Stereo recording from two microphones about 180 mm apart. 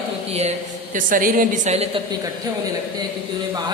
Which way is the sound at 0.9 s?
50° right (ahead or behind).